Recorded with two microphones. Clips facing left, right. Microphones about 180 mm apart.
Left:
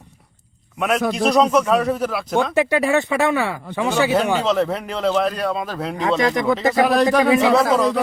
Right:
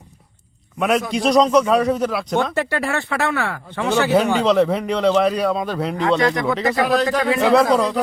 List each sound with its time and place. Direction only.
0.8 s a man's voice: centre (ahead or behind)
2.6 s speech: 15° left (ahead or behind)
4.2 s a man's voice: centre (ahead or behind)
6.7 s a man's voice: 20° left (ahead or behind)
7.5 s a man's voice: centre (ahead or behind)